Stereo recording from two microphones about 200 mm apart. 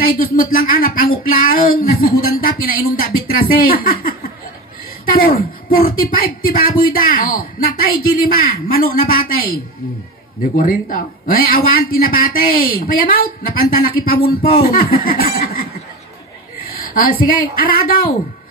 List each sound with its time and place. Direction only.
0.0 s a man's voice: 45° left (ahead or behind)
16.6 s speech: 45° left (ahead or behind)